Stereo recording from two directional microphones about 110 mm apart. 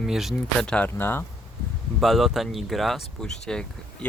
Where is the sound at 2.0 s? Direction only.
Centre (ahead or behind).